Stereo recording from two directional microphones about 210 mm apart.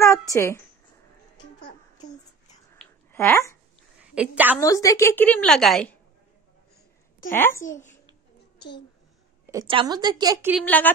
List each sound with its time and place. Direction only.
0.0 s speech: 15° left (ahead or behind)
2.8 s a sound: 10° left (ahead or behind)
4.0 s a woman's voice: 5° right (ahead or behind)
4.6 s a woman's voice: 15° left (ahead or behind)
7.3 s a woman's voice: 10° left (ahead or behind)
7.6 s a child's voice: 35° left (ahead or behind)
9.5 s a woman's voice: 20° right (ahead or behind)
10.6 s a woman's voice: 10° left (ahead or behind)